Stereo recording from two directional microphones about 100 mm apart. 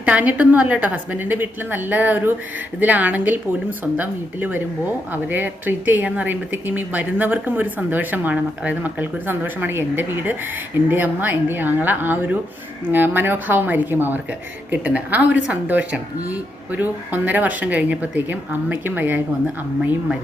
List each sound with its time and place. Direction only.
0.0 s a woman's voice: 15° right (ahead or behind)